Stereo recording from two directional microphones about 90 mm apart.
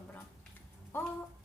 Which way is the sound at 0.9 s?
25° left (ahead or behind).